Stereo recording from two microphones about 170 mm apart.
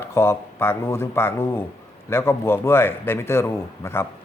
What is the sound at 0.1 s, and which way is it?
A man's voice, 15° left (ahead or behind).